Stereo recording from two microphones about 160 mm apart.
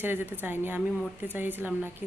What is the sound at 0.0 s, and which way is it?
A woman's voice, 15° right (ahead or behind).